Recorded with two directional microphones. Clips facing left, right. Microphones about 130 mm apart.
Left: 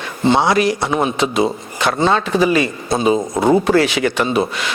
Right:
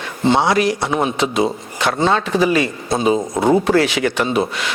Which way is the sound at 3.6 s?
10° left (ahead or behind).